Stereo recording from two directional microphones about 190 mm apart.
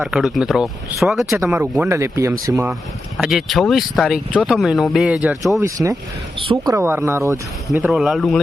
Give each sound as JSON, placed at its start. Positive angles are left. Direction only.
{"t": 0.0, "sound": "speech", "side_deg": -5}
{"t": 3.2, "sound": "speech", "side_deg": 0}
{"t": 5.5, "sound": "speech", "side_deg": -15}
{"t": 6.7, "sound": "speech", "side_deg": -10}
{"t": 7.7, "sound": "speech", "side_deg": 0}